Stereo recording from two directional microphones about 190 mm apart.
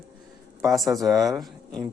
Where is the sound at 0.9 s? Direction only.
Centre (ahead or behind).